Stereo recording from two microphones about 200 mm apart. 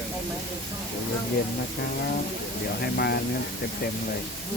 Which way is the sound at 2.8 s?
50° left (ahead or behind).